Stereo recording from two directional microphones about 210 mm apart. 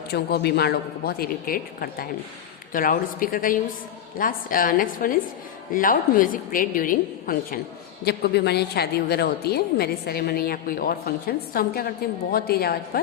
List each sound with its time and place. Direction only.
0.1 s a woman's voice: 50° left (ahead or behind)